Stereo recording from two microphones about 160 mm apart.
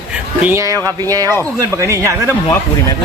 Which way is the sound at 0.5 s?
20° right (ahead or behind).